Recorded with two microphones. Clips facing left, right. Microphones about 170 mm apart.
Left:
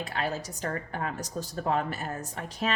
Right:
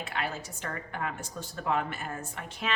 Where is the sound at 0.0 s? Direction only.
35° left (ahead or behind).